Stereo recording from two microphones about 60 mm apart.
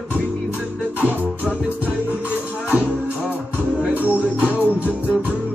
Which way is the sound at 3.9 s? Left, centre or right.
Right.